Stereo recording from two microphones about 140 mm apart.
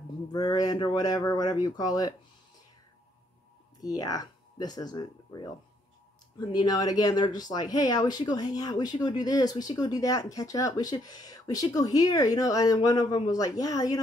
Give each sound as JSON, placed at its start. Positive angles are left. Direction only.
{"t": 0.3, "sound": "speech", "side_deg": 30}
{"t": 3.8, "sound": "speech", "side_deg": 25}
{"t": 6.5, "sound": "speech", "side_deg": 25}